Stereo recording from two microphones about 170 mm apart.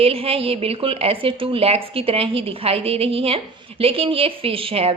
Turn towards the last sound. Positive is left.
turn(degrees=-35)  # may be behind; listen again after turning